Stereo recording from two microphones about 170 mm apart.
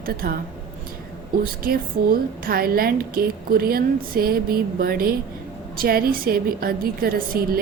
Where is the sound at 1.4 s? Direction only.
60° right (ahead or behind).